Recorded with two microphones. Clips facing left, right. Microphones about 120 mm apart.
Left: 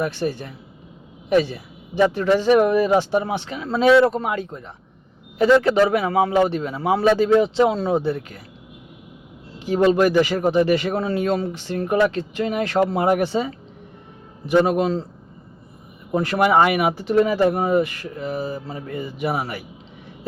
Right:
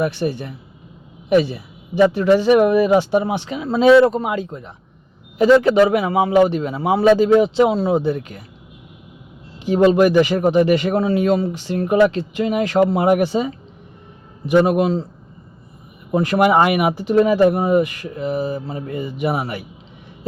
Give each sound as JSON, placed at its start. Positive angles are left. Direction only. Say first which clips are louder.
{"t": 0.0, "sound": "speech", "louder": "right 3 dB", "side_deg": -15}
{"t": 9.6, "sound": "speech", "louder": "right 3 dB", "side_deg": -20}
{"t": 16.1, "sound": "speech", "louder": "right 2 dB", "side_deg": -15}